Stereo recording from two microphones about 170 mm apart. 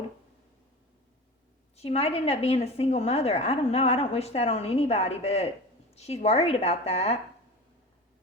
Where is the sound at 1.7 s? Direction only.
40° left (ahead or behind).